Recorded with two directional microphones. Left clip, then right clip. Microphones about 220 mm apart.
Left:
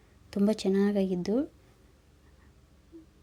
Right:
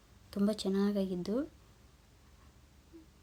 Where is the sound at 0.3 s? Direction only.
20° left (ahead or behind).